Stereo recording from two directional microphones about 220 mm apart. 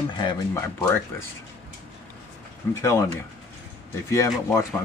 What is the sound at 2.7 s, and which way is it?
Speech, 15° left (ahead or behind).